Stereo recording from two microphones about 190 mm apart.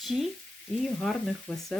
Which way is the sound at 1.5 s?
5° left (ahead or behind).